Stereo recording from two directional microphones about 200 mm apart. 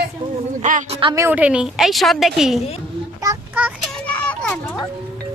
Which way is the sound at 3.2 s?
10° right (ahead or behind).